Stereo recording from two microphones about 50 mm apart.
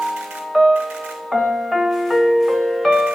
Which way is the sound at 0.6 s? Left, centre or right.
Centre.